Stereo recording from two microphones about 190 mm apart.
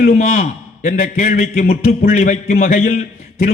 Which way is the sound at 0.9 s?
50° left (ahead or behind).